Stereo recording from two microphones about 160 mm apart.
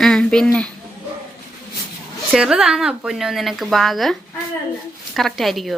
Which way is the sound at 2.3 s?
5° right (ahead or behind).